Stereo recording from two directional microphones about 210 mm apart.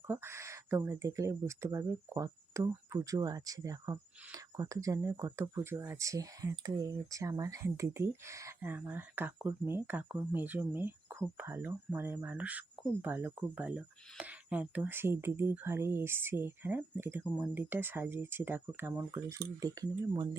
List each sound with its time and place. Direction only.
0.1 s speech: 10° right (ahead or behind)